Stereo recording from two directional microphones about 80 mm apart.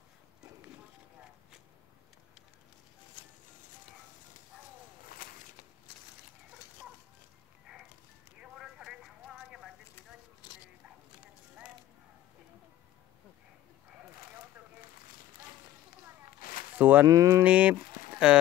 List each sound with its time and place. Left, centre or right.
8.4 s clip-clop: centre
16.7 s speech: right
17.1 s speech: right
17.4 s speech: centre